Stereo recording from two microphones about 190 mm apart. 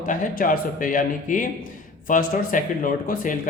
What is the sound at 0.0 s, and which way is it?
Speech, 45° left (ahead or behind).